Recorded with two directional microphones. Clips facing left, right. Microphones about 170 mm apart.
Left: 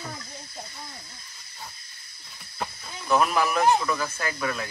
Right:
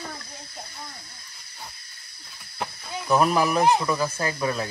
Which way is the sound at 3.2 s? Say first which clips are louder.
Right 3 dB; 35° right (ahead or behind).